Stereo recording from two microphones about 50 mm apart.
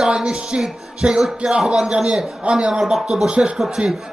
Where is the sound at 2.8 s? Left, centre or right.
Centre.